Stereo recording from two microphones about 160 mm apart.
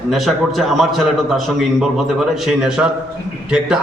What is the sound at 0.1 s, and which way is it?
A man's voice, centre (ahead or behind).